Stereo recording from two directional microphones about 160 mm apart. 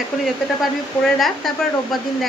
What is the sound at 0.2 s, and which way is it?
Speech, centre (ahead or behind).